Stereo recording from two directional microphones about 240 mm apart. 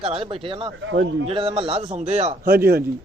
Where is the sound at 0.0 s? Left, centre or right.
Right.